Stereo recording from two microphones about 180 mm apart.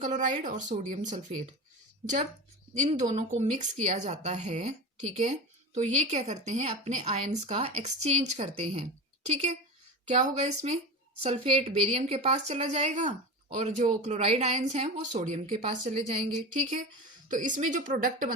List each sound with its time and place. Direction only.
0.0 s a woman's voice: 45° right (ahead or behind)
2.7 s a woman's voice: 40° right (ahead or behind)
17.2 s a woman's voice: 45° right (ahead or behind)